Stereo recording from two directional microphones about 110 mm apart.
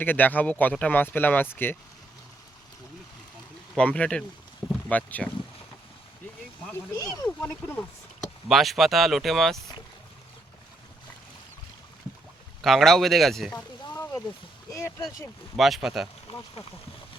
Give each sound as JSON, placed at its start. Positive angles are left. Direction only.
{"t": 0.0, "sound": "speech", "side_deg": 15}
{"t": 3.8, "sound": "speech", "side_deg": 10}
{"t": 6.9, "sound": "speech", "side_deg": 30}
{"t": 7.3, "sound": "speech", "side_deg": 20}
{"t": 8.4, "sound": "speech", "side_deg": 0}
{"t": 12.6, "sound": "speech", "side_deg": 0}
{"t": 13.9, "sound": "a sound", "side_deg": 30}
{"t": 14.7, "sound": "speech", "side_deg": 25}
{"t": 15.5, "sound": "speech", "side_deg": 0}